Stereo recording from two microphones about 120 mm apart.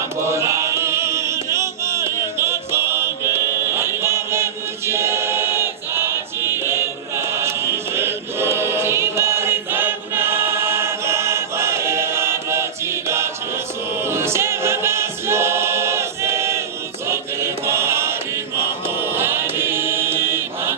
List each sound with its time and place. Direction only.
0.3 s music: 25° right (ahead or behind)
4.9 s choir: 20° right (ahead or behind)
14.1 s choir: 20° right (ahead or behind)
19.1 s choir: 20° right (ahead or behind)